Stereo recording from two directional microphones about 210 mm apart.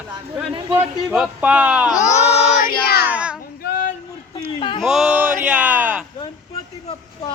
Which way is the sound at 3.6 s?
40° left (ahead or behind).